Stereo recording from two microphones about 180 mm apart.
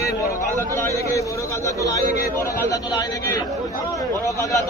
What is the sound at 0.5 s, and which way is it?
Speech, 15° left (ahead or behind).